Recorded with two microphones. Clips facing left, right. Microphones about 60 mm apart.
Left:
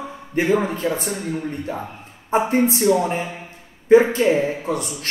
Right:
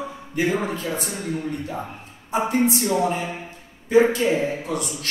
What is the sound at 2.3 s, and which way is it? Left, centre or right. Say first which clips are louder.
Speech: left 3 dB; left.